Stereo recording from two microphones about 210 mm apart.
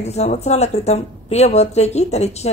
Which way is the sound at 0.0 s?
30° left (ahead or behind).